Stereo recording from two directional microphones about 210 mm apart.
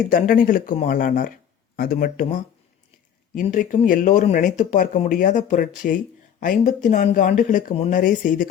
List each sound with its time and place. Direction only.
0.1 s speech: 40° left (ahead or behind)